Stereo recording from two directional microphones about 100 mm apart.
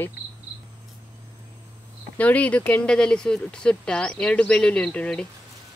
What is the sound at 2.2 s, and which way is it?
Speech, 15° left (ahead or behind).